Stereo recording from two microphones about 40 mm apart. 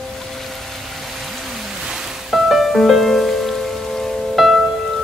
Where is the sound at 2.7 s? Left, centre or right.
Centre.